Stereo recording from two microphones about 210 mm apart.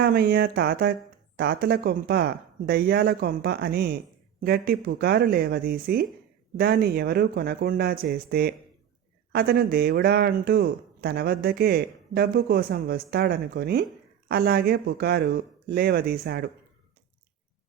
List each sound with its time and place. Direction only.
0.0 s speech: 50° right (ahead or behind)